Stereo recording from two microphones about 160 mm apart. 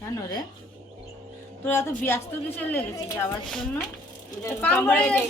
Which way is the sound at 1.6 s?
15° left (ahead or behind).